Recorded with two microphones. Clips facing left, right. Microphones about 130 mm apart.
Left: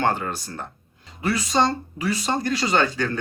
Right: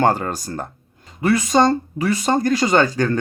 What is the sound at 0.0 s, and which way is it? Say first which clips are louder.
Speech: right 5 dB; 40° right (ahead or behind).